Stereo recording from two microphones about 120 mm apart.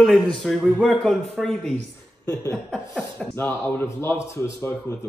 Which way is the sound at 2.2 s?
30° left (ahead or behind).